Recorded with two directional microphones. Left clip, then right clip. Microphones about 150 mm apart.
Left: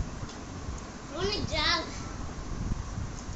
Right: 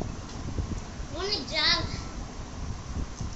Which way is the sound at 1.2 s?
20° right (ahead or behind).